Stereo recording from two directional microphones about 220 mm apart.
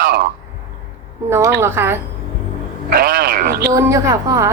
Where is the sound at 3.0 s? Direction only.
40° right (ahead or behind).